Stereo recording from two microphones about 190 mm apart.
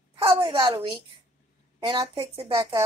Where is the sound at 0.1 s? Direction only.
30° right (ahead or behind).